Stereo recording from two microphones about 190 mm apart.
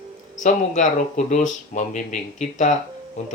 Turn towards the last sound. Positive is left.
turn(degrees=35)  # may be behind; listen again after turning